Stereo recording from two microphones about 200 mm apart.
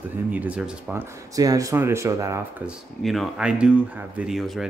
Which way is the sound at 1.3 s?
15° right (ahead or behind).